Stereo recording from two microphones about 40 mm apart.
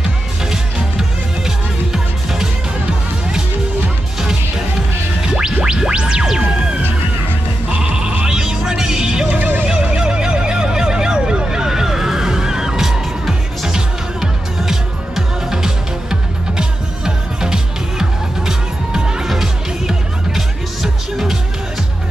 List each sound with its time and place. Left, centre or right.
0.5 s music: centre
5.2 s music: right
8.3 s music: centre
9.3 s neigh: right
9.7 s neigh: right
19.4 s music: centre